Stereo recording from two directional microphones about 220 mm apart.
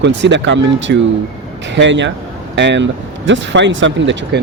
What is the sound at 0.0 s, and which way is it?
Speech, 55° right (ahead or behind).